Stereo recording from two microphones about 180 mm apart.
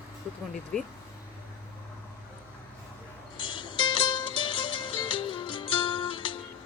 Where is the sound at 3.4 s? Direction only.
25° left (ahead or behind).